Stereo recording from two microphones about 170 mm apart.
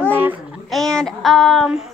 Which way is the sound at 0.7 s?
5° left (ahead or behind).